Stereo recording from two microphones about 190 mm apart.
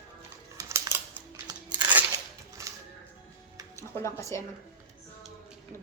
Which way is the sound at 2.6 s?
15° right (ahead or behind).